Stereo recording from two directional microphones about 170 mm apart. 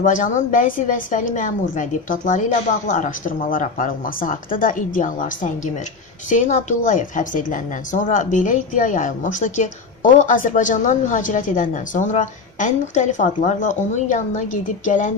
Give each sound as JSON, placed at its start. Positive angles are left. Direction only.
{"t": 0.0, "sound": "a woman's voice", "side_deg": 50}